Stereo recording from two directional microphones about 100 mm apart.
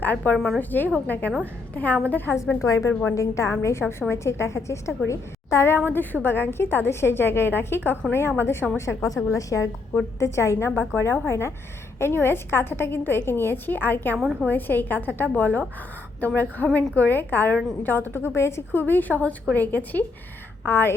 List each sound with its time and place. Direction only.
0.0 s a woman's voice: 20° left (ahead or behind)
0.3 s a woman's voice: 5° left (ahead or behind)
0.6 s a woman's voice: 20° left (ahead or behind)